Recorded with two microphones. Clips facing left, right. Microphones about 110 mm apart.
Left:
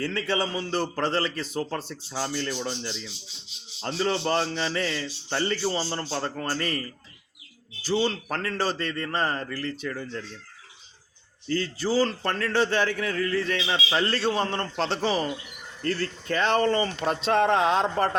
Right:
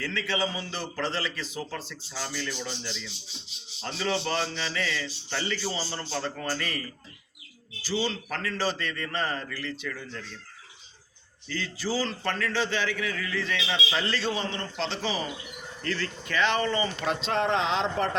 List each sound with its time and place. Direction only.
0.0 s a man's voice: 45° left (ahead or behind)
7.9 s a man's voice: 50° left (ahead or behind)
11.4 s a man's voice: 45° left (ahead or behind)